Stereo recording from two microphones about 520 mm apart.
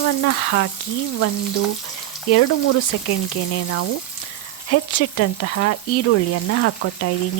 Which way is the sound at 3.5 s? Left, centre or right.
Left.